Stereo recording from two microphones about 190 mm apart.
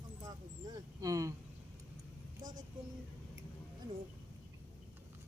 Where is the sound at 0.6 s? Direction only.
20° right (ahead or behind).